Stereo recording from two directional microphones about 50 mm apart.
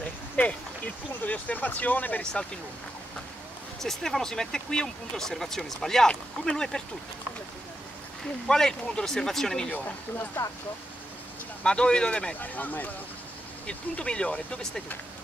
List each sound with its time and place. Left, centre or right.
0.4 s speech: left
3.8 s speech: centre
8.5 s speech: centre
10.4 s speech: left
11.6 s speech: centre
12.4 s speech: left
13.7 s speech: centre